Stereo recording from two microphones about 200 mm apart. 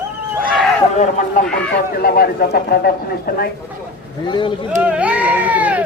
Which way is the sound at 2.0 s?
50° left (ahead or behind).